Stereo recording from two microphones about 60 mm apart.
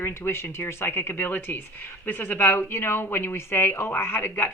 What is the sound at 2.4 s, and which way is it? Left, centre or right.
Speech, left.